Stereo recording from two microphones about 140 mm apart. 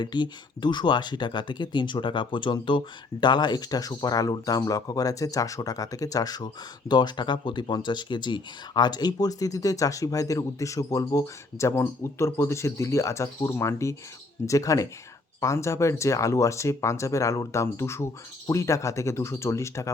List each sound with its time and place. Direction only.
0.0 s speech: 35° left (ahead or behind)